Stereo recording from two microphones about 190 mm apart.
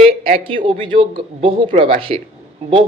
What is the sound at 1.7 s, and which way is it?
Speech, 45° right (ahead or behind).